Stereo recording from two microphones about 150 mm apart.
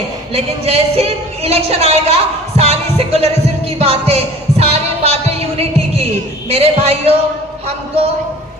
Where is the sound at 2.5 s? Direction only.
45° right (ahead or behind).